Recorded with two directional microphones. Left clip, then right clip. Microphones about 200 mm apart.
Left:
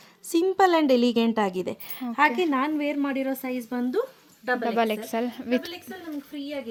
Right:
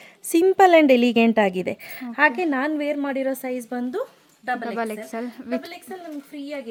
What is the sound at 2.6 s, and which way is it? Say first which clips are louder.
A woman's voice: right 2 dB; 55° right (ahead or behind).